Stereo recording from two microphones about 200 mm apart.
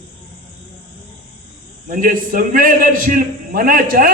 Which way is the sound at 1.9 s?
45° right (ahead or behind).